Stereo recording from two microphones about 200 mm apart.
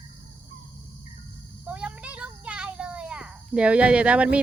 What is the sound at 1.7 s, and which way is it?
Child singing, 5° right (ahead or behind).